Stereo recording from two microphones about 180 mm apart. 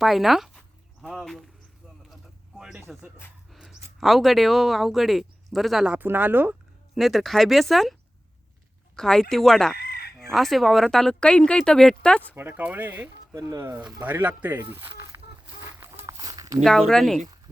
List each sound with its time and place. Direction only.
0.0 s speech: centre (ahead or behind)
2.6 s a sound: 5° right (ahead or behind)
4.0 s speech: centre (ahead or behind)
7.0 s speech: centre (ahead or behind)
9.0 s speech: 5° left (ahead or behind)
9.7 s chicken: 60° left (ahead or behind)
10.2 s speech: centre (ahead or behind)
12.3 s speech: 10° right (ahead or behind)
16.0 s a sound: 20° right (ahead or behind)
16.6 s speech: centre (ahead or behind)